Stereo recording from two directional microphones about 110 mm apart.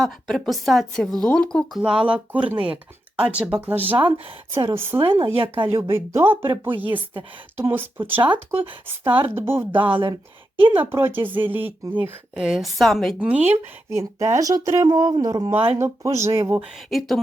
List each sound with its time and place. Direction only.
0.0 s a woman's voice: centre (ahead or behind)
1.8 s speech: 10° right (ahead or behind)
4.9 s speech: 50° right (ahead or behind)
5.6 s speech: 25° right (ahead or behind)
12.3 s a woman's voice: 5° right (ahead or behind)
13.1 s speech: 15° right (ahead or behind)
13.9 s speech: 25° right (ahead or behind)
16.6 s a woman's voice: centre (ahead or behind)